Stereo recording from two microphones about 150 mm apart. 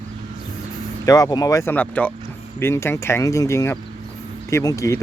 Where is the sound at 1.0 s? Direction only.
25° left (ahead or behind).